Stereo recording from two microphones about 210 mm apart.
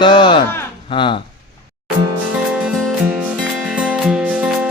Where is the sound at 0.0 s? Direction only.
25° left (ahead or behind).